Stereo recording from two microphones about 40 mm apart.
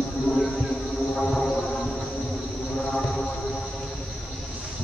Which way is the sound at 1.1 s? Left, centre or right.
Centre.